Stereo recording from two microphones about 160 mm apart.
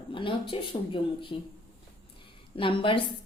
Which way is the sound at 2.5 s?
35° left (ahead or behind).